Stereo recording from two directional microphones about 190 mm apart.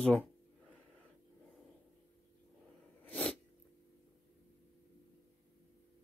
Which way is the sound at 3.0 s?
5° left (ahead or behind).